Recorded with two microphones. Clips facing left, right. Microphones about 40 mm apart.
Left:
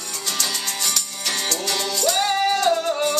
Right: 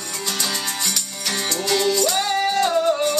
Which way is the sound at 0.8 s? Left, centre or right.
Centre.